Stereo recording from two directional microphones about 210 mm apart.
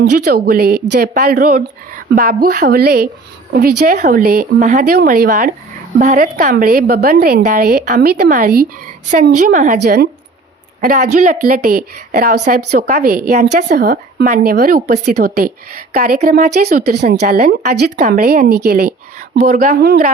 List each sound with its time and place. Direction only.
0.3 s a woman's voice: 45° right (ahead or behind)
9.8 s a woman's voice: 50° right (ahead or behind)